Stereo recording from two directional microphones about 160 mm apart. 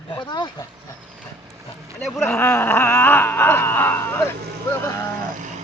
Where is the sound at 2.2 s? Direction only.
15° left (ahead or behind).